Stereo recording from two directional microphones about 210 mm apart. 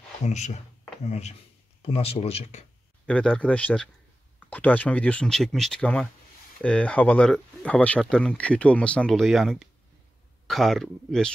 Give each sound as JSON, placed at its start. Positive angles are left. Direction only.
{"t": 0.2, "sound": "speech", "side_deg": 35}
{"t": 3.1, "sound": "speech", "side_deg": 5}